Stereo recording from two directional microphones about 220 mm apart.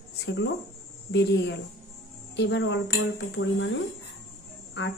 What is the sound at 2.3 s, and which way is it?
Speech, 55° left (ahead or behind).